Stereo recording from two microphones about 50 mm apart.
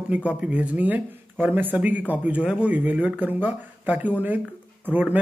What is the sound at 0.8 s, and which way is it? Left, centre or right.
A man's voice, right.